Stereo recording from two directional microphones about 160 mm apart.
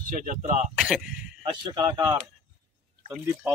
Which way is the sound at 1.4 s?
25° right (ahead or behind).